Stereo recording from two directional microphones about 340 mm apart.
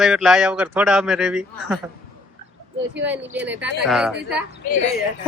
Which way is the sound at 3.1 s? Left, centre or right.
Centre.